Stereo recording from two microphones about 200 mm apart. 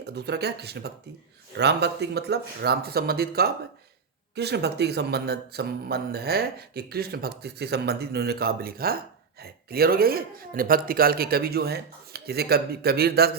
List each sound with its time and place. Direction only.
0.0 s speech: 55° right (ahead or behind)